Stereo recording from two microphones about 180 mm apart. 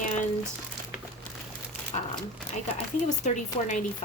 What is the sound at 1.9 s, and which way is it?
A woman's voice, 35° left (ahead or behind).